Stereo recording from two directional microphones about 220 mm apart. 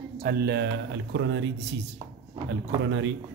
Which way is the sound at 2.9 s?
55° right (ahead or behind).